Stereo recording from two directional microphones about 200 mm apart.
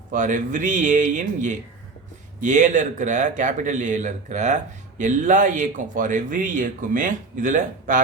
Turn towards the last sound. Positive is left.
turn(degrees=-40)  # may be behind; listen again after turning